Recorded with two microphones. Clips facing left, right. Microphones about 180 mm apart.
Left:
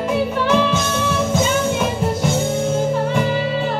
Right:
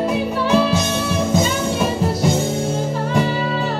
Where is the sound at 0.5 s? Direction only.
35° right (ahead or behind).